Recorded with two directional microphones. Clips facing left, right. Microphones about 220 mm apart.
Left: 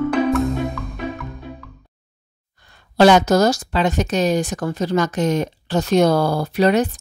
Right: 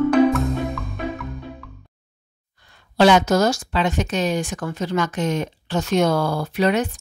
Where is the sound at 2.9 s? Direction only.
40° left (ahead or behind).